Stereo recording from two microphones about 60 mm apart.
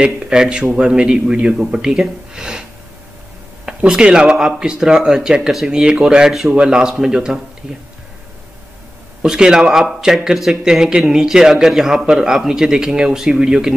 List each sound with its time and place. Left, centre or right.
0.0 s a man's voice: centre
3.6 s a man's voice: centre
9.2 s a man's voice: centre